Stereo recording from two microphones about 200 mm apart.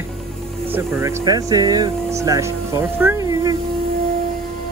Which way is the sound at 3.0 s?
10° right (ahead or behind).